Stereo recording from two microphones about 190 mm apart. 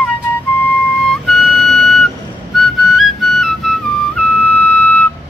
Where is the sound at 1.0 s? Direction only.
Centre (ahead or behind).